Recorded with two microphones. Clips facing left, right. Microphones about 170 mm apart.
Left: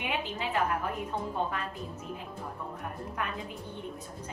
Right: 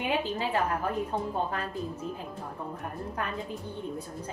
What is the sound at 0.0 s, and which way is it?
Speech, 35° right (ahead or behind).